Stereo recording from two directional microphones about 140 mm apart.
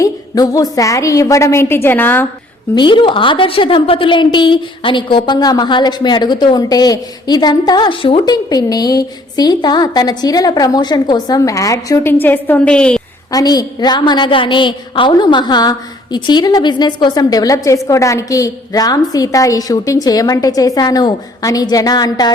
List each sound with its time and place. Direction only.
0.0 s a woman's voice: 25° left (ahead or behind)
2.7 s a woman's voice: 35° left (ahead or behind)
12.2 s a woman's voice: 15° left (ahead or behind)
13.3 s a woman's voice: 25° left (ahead or behind)